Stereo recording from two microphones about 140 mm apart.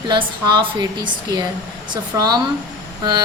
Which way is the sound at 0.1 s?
30° right (ahead or behind).